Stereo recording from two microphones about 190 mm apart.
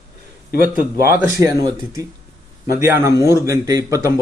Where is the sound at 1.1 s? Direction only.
15° right (ahead or behind).